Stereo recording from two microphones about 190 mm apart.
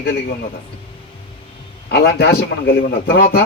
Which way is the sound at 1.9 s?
60° left (ahead or behind).